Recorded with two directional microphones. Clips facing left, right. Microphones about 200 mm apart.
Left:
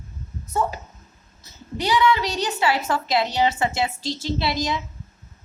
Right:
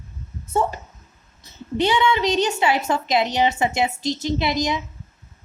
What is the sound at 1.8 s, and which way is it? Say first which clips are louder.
A woman's voice: right 1 dB; 25° right (ahead or behind).